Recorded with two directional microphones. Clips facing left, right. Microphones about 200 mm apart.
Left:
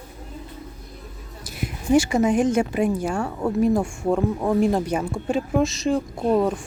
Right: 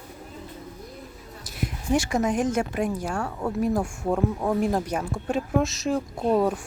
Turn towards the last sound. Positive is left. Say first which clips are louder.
# left 2 dB
turn(degrees=-5)  # may be behind; listen again after turning